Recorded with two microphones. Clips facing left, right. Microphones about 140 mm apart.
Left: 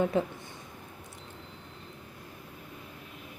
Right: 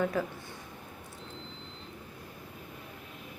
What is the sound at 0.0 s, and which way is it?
Speech, 25° left (ahead or behind).